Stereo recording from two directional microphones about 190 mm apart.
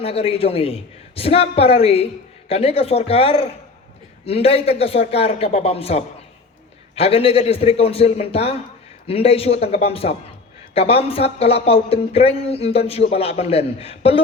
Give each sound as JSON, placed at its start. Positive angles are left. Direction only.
{"t": 0.0, "sound": "speech", "side_deg": 30}